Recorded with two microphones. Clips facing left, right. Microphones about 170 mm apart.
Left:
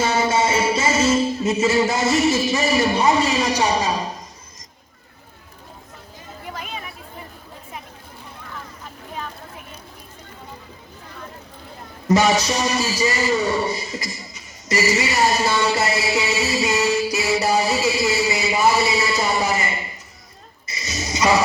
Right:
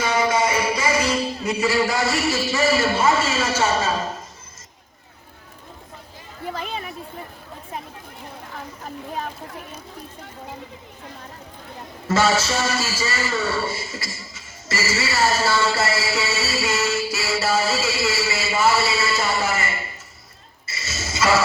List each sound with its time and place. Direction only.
0.0 s music: 25° left (ahead or behind)
12.0 s a man's voice: 15° left (ahead or behind)
20.7 s a sound: 15° left (ahead or behind)